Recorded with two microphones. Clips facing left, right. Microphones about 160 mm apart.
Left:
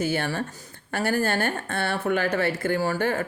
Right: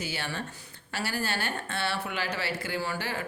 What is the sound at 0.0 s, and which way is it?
Speech, 50° left (ahead or behind).